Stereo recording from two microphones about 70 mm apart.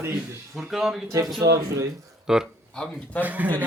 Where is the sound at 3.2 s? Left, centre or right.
Right.